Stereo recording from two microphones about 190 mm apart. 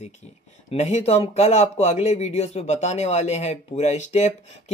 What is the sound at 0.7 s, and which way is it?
Speech, 35° left (ahead or behind).